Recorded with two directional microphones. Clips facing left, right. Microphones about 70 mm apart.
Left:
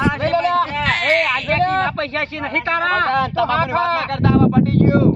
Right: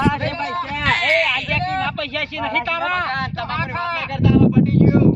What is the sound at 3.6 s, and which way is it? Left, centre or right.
Speech, left.